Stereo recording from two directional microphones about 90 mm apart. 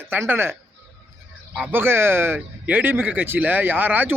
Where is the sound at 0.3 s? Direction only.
25° right (ahead or behind).